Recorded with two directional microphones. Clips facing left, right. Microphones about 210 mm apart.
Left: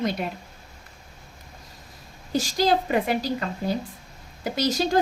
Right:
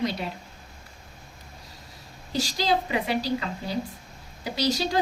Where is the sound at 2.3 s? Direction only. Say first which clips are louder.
Left 3 dB; 50° left (ahead or behind).